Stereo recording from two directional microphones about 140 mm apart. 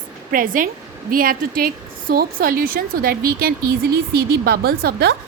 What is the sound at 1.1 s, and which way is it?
A woman's voice, 90° right.